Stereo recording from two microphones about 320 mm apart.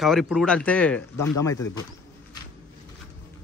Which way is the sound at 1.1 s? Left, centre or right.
Left.